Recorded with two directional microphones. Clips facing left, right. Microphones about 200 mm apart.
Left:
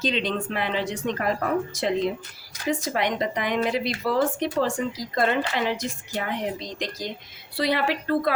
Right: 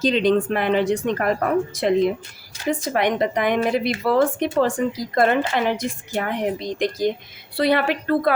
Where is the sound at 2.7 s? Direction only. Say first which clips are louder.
Right 4 dB; 55° right (ahead or behind).